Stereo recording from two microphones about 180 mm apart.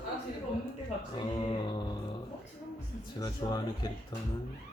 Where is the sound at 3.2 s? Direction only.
20° left (ahead or behind).